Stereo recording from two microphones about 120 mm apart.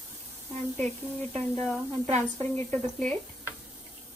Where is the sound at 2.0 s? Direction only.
65° right (ahead or behind).